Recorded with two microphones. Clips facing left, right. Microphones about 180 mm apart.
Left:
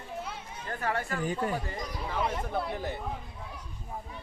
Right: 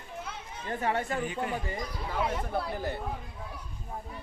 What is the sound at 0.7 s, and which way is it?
Speech, 20° right (ahead or behind).